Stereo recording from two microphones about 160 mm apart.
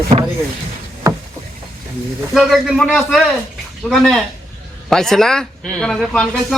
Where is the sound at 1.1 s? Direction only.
20° right (ahead or behind).